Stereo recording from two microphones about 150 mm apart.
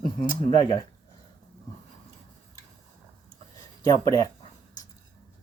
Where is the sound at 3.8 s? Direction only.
20° left (ahead or behind).